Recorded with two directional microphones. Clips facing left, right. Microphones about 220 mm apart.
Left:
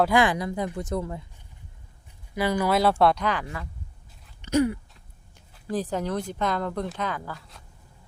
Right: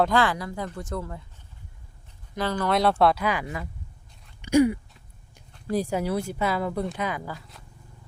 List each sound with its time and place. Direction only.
0.0 s a woman's voice: 15° left (ahead or behind)
2.3 s speech: 10° left (ahead or behind); by 3.7 s 10° right (ahead or behind)
4.4 s a sound: 10° right (ahead or behind)
5.7 s speech: 10° right (ahead or behind)
7.3 s speech: centre (ahead or behind)